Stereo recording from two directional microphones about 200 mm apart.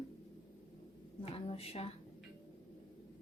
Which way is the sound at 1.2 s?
30° left (ahead or behind).